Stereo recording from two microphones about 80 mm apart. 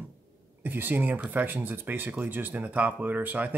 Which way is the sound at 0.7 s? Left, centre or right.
Right.